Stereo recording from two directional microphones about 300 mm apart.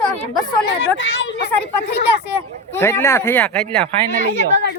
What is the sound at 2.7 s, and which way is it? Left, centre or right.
Speech, centre.